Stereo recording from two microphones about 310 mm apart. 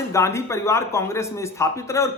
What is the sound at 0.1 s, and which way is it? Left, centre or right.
A man's voice, centre.